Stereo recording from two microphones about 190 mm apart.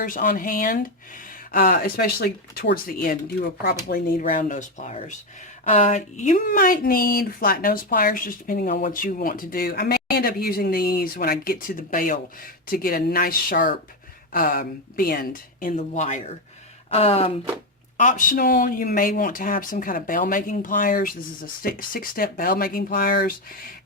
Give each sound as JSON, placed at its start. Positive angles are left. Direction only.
{"t": 0.0, "sound": "speech", "side_deg": 50}
{"t": 17.9, "sound": "speech", "side_deg": 40}